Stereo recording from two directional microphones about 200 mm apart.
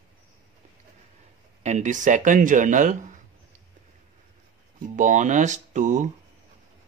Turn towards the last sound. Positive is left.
turn(degrees=-40)  # may be behind; listen again after turning